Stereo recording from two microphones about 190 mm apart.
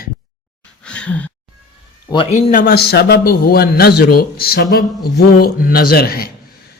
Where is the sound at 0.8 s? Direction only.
5° left (ahead or behind).